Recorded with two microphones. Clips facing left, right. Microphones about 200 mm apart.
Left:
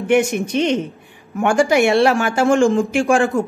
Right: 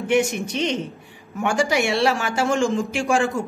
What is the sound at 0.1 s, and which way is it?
Speech, 55° left (ahead or behind).